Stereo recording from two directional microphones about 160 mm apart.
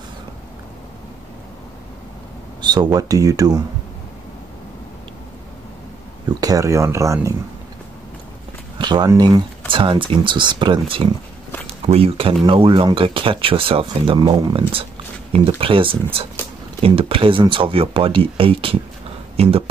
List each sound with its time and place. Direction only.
2.6 s speech: 25° right (ahead or behind)
6.4 s speech: 20° right (ahead or behind)
8.7 s speech: 25° right (ahead or behind)